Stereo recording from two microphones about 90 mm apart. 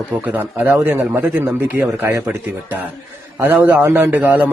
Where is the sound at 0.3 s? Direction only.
20° right (ahead or behind).